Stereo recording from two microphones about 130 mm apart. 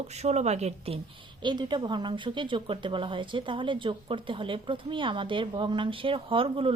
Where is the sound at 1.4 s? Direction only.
35° right (ahead or behind).